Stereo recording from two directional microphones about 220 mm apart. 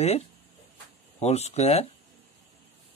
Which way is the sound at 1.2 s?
30° left (ahead or behind).